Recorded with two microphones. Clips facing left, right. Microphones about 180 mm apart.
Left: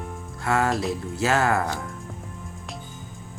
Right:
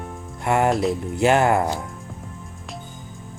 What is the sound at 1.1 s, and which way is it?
Speech, 20° right (ahead or behind).